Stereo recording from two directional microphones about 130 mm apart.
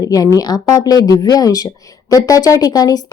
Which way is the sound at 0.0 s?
25° left (ahead or behind).